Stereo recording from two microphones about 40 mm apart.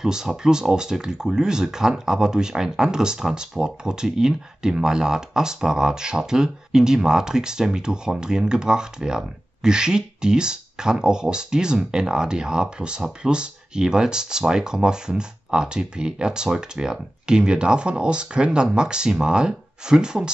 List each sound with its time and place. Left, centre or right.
0.0 s speech: centre